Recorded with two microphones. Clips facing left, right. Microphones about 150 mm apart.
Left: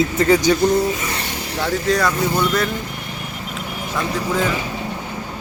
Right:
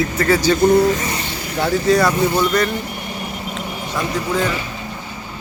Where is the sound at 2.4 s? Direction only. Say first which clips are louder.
Right 2 dB; centre (ahead or behind).